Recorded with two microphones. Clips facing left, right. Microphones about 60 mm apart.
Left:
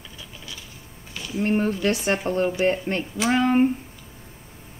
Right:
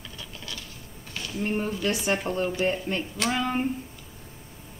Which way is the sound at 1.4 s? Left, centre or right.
Left.